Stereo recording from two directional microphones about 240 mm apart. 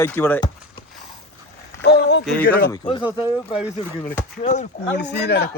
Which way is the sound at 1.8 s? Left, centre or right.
Left.